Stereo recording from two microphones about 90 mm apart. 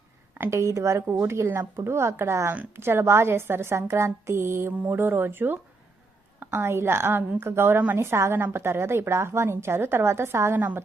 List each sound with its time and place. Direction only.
0.3 s a woman's voice: 30° right (ahead or behind)